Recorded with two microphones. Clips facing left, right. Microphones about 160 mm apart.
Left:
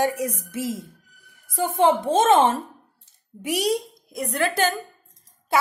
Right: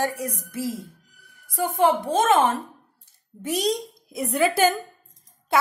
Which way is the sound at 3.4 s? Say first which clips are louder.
Left 1 dB; 10° left (ahead or behind).